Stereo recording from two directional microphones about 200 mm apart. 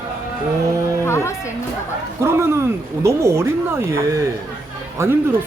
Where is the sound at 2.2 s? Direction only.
15° right (ahead or behind).